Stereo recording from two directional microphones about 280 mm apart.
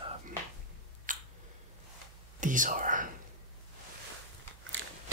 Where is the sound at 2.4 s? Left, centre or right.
Right.